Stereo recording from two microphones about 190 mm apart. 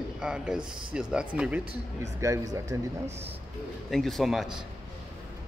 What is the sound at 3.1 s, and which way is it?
Speech, 35° right (ahead or behind).